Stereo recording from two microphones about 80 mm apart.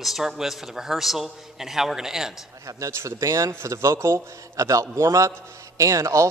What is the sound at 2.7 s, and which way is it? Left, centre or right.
Speech, right.